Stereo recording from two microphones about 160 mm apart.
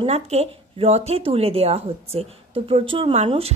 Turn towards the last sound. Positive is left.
turn(degrees=-35)  # may be behind; listen again after turning